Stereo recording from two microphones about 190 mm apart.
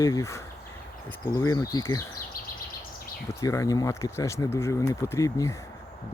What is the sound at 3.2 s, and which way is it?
Speech, 15° left (ahead or behind).